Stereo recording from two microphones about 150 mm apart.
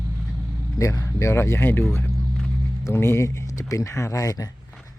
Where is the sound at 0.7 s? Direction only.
20° left (ahead or behind).